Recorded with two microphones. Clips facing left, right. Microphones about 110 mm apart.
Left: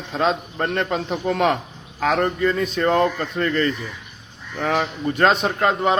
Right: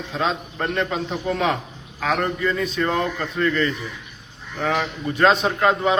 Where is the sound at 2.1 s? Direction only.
40° left (ahead or behind).